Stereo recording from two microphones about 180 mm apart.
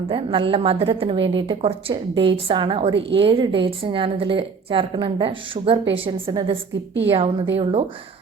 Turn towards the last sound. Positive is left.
turn(degrees=-35)  # may be behind; listen again after turning